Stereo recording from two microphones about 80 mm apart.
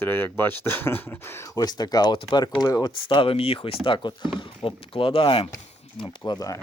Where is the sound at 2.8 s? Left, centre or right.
Left.